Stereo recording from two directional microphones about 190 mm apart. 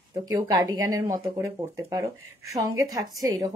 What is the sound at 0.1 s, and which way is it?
A woman's voice, 20° right (ahead or behind).